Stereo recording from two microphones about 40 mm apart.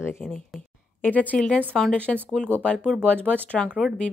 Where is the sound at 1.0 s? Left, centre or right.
Left.